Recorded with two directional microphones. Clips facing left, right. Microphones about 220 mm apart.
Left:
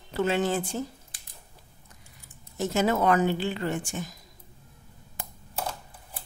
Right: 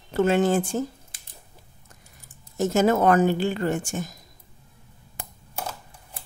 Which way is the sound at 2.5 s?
45° right (ahead or behind).